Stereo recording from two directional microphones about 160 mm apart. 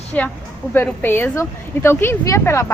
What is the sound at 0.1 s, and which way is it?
A woman's voice, 10° left (ahead or behind).